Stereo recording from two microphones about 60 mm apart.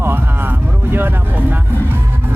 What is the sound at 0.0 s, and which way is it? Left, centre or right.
Vehicle, right.